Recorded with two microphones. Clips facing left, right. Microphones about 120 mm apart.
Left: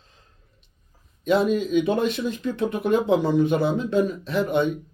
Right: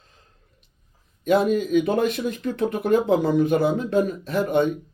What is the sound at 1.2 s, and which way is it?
Speech, 50° right (ahead or behind).